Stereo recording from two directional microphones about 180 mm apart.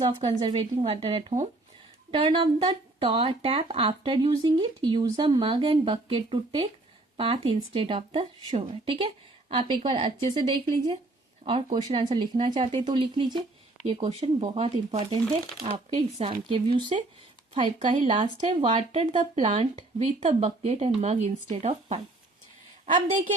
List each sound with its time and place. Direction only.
0.0 s speech: 25° right (ahead or behind)